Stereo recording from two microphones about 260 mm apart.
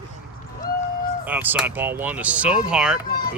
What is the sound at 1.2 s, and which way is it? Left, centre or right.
Speech, centre.